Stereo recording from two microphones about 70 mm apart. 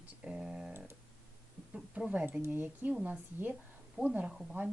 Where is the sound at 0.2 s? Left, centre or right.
Centre.